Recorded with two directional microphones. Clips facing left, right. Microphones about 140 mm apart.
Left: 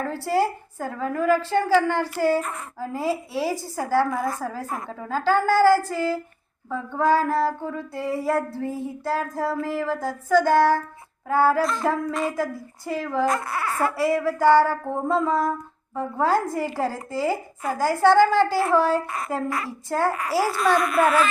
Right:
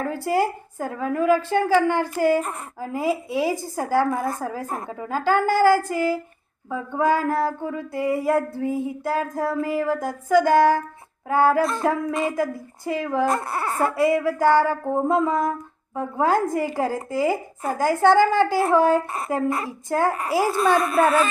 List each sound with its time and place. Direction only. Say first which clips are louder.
0.0 s a woman's voice: right 1 dB; 15° right (ahead or behind)
1.9 s a sound: right 2 dB; 15° right (ahead or behind)
19.3 s a woman's voice: right 4 dB; 20° right (ahead or behind)